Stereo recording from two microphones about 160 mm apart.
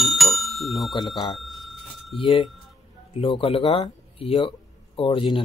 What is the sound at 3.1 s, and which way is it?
Speech, 35° left (ahead or behind).